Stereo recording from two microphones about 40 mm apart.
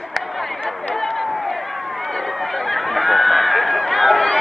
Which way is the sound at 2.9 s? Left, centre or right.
Centre.